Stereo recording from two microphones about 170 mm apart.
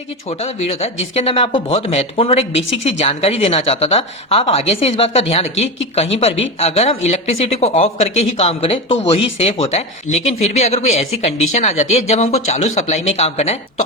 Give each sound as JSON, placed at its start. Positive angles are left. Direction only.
{"t": 0.3, "sound": "speech", "side_deg": 35}